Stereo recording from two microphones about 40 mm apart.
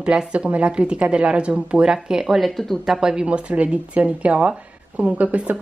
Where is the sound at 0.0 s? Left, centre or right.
Right.